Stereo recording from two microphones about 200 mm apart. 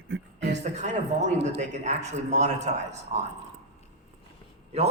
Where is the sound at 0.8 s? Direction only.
35° right (ahead or behind).